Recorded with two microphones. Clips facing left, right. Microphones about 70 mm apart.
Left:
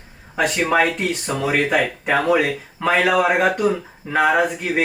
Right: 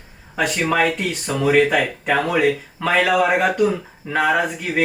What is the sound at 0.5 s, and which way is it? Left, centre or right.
Speech, centre.